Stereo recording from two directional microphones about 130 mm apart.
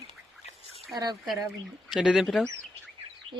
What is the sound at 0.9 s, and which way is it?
Speech, 30° right (ahead or behind).